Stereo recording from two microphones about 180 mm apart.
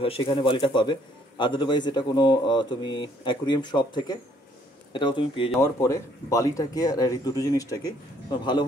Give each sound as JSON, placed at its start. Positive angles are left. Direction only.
{"t": 0.0, "sound": "speech", "side_deg": 30}
{"t": 5.6, "sound": "speech", "side_deg": 15}